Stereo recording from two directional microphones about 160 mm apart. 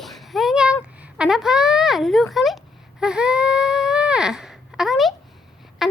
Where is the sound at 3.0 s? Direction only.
5° right (ahead or behind).